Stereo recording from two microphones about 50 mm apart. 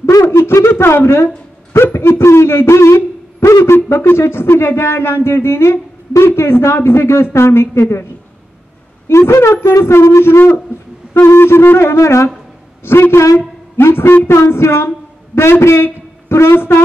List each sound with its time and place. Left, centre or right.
0.4 s a sound: left
0.7 s speech: left
3.7 s speech: left
13.7 s a man's voice: left